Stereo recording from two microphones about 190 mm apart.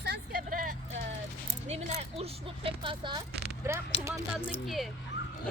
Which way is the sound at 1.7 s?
35° right (ahead or behind).